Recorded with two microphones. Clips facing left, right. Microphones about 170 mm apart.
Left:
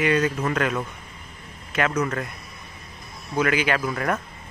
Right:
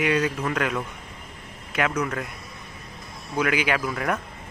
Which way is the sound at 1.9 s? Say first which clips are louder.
Left 2 dB; 5° right (ahead or behind).